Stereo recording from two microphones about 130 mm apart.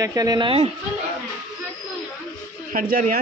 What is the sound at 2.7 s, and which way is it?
Speech, 90° right.